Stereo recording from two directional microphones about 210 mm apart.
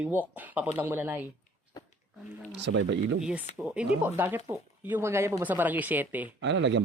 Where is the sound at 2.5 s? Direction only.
55° right (ahead or behind).